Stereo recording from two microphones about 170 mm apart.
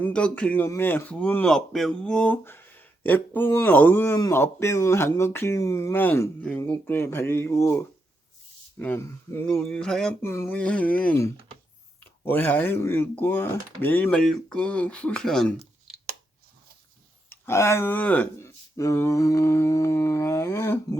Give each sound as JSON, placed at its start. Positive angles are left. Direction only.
{"t": 0.0, "sound": "speech", "side_deg": 5}
{"t": 10.2, "sound": "speech", "side_deg": 15}
{"t": 17.2, "sound": "speech", "side_deg": 15}